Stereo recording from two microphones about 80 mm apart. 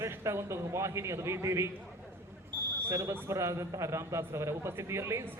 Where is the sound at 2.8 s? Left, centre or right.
Right.